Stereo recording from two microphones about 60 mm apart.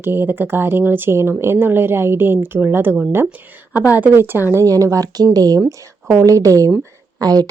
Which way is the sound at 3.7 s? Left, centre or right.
Right.